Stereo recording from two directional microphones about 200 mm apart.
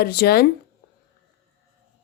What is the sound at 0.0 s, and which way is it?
Speech, 50° left (ahead or behind).